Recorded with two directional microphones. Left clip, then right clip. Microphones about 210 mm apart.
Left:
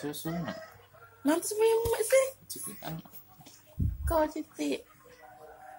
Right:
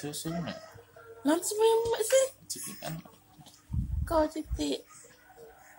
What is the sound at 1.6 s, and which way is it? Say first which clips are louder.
Speech: right 1 dB; 5° right (ahead or behind).